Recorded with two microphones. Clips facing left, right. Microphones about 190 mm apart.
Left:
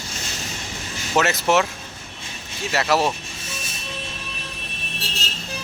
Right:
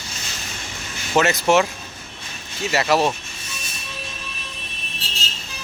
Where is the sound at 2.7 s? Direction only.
Centre (ahead or behind).